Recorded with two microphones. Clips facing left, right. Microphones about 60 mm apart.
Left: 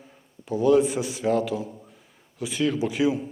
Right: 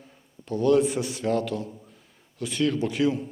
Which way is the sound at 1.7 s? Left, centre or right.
Centre.